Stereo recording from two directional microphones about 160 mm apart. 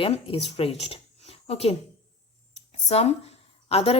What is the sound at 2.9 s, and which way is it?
A woman's voice, 45° left (ahead or behind).